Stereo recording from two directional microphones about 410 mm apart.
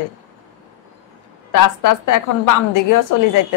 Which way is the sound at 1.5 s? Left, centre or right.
Left.